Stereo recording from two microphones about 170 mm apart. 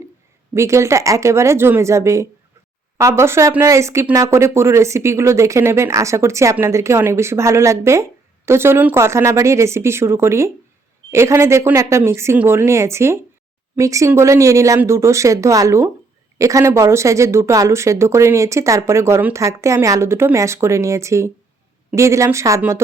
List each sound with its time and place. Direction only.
0.5 s speech: 15° right (ahead or behind)